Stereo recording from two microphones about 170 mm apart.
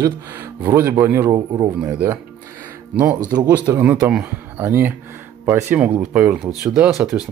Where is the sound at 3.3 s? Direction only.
10° right (ahead or behind).